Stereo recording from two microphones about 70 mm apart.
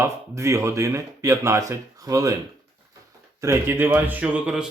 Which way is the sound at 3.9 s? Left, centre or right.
Right.